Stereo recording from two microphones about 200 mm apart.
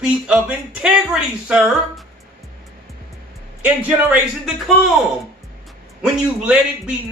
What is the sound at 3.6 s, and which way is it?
A man's voice, 5° right (ahead or behind).